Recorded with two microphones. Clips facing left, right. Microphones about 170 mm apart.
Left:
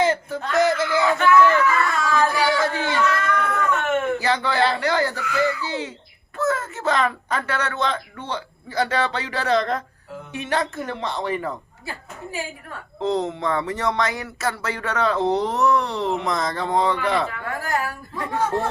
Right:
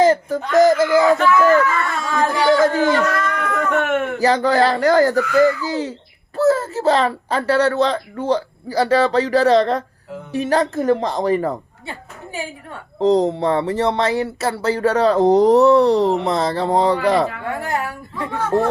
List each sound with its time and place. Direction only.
0.0 s speech: 40° right (ahead or behind)
3.5 s a sound: 60° right (ahead or behind)
4.2 s speech: 40° right (ahead or behind)
17.6 s speech: 25° right (ahead or behind)